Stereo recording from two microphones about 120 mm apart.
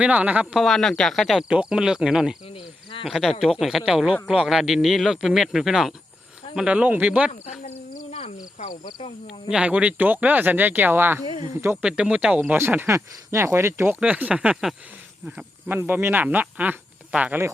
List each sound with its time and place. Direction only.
0.0 s speech: 10° right (ahead or behind)
0.6 s a man's voice: 5° left (ahead or behind); by 7.3 s 10° right (ahead or behind)
7.3 s speech: 80° left
9.2 s speech: 5° right (ahead or behind)
15.4 s speech: 15° right (ahead or behind)